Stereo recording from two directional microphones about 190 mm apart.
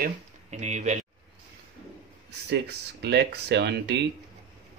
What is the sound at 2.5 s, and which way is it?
Speech, 65° right (ahead or behind).